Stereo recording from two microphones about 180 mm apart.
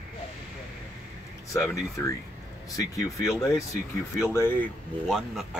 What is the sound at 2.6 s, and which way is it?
Speech, 20° left (ahead or behind).